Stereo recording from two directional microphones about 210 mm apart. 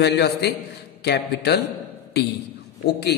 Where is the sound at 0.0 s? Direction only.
50° left (ahead or behind).